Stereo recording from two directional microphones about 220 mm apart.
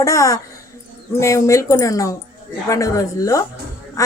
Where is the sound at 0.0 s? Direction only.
15° left (ahead or behind).